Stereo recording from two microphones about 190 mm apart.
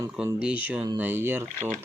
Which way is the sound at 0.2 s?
5° right (ahead or behind).